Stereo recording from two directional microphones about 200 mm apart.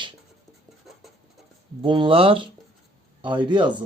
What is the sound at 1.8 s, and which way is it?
Speech, 25° right (ahead or behind).